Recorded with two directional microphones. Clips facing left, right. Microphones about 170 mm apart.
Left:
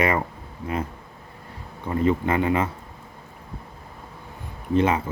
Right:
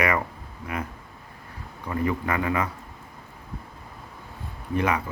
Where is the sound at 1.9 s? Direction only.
25° left (ahead or behind).